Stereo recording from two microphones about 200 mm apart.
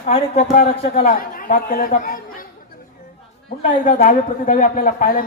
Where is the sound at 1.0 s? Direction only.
45° left (ahead or behind).